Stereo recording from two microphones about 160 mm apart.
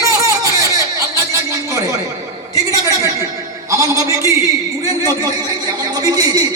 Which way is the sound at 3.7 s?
20° right (ahead or behind).